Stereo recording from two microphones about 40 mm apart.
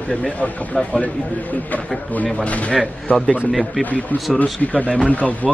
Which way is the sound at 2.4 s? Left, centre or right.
Left.